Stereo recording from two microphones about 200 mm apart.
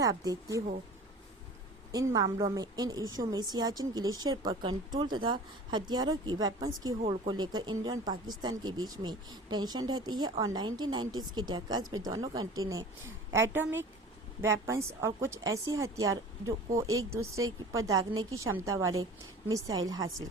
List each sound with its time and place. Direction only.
0.0 s a woman's voice: 20° right (ahead or behind)
2.1 s a woman's voice: 20° right (ahead or behind)